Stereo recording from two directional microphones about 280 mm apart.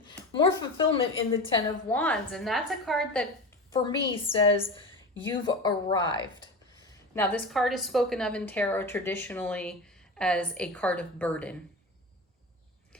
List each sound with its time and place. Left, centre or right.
0.0 s a woman's voice: centre
3.7 s a woman's voice: centre